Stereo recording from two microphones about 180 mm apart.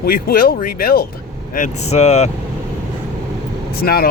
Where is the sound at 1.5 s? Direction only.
40° left (ahead or behind).